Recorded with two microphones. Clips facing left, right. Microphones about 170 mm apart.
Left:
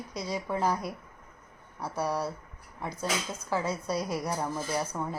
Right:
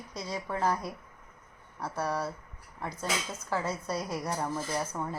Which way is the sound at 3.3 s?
Centre (ahead or behind).